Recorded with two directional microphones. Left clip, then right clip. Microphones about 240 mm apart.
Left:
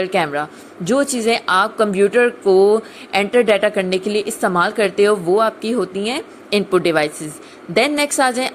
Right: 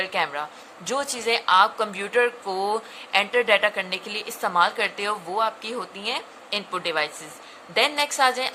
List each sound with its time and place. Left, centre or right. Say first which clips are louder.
0.0 s a woman's voice: left 7 dB; centre